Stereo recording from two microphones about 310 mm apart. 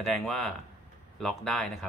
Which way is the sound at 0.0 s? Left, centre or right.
Centre.